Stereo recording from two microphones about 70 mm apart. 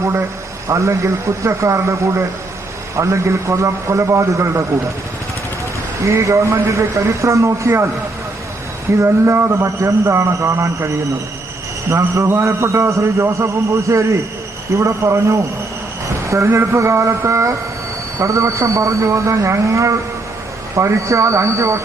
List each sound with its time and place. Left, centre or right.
0.0 s a sound: right
0.7 s speech: right
6.1 s speech: right
8.9 s a man's voice: right
16.2 s a sound: right
16.5 s speech: right